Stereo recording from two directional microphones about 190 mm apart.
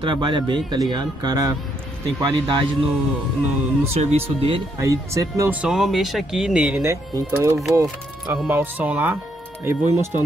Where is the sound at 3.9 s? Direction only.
30° right (ahead or behind).